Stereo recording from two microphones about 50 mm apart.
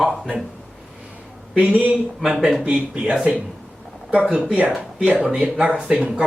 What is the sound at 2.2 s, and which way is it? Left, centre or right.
Speech, centre.